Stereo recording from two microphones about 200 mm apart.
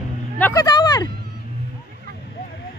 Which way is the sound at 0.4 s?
15° left (ahead or behind).